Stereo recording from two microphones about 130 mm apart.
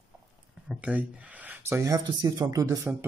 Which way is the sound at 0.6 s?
10° right (ahead or behind).